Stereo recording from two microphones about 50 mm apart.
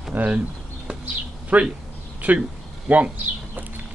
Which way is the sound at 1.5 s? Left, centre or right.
Right.